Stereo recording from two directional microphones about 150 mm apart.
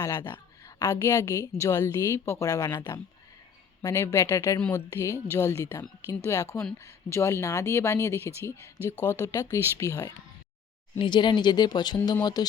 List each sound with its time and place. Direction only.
0.0 s a woman's voice: 25° left (ahead or behind)
10.9 s speech: 30° left (ahead or behind)